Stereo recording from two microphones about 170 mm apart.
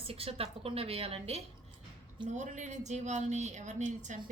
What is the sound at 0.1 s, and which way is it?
A woman's voice, 35° right (ahead or behind).